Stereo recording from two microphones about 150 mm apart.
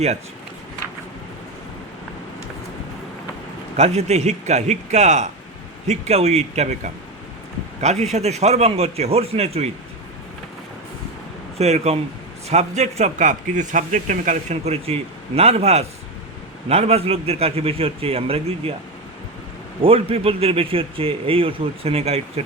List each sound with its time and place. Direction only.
3.8 s a man's voice: 45° right (ahead or behind)
11.5 s a man's voice: 45° right (ahead or behind)
19.8 s speech: 40° right (ahead or behind)